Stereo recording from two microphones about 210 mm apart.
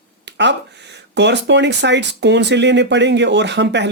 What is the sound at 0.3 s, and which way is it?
Speech, 55° right (ahead or behind).